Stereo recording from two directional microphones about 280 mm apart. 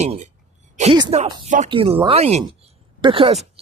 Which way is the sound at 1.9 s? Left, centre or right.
Centre.